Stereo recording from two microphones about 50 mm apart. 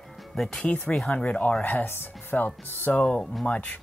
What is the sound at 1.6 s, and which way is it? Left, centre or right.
Speech, left.